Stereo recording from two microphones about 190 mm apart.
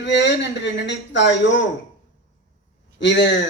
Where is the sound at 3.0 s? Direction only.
65° left (ahead or behind).